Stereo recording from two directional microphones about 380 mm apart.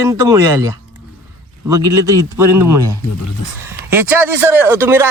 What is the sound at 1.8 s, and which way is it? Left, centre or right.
Speech, right.